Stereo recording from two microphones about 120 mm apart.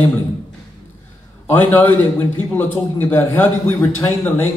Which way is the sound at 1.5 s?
15° left (ahead or behind).